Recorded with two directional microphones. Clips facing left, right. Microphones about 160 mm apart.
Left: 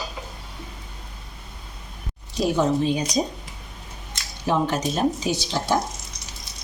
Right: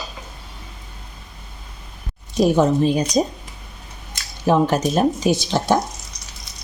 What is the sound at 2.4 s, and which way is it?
Speech, 45° right (ahead or behind).